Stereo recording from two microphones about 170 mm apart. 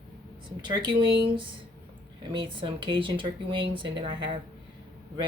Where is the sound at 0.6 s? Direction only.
25° right (ahead or behind).